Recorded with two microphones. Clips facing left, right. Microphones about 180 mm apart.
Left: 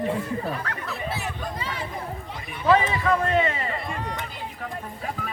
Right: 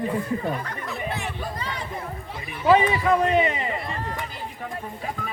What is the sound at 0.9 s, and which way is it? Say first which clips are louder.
Chatter: right 2 dB; centre (ahead or behind).